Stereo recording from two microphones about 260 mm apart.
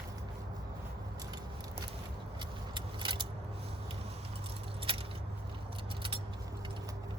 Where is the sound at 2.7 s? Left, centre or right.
Centre.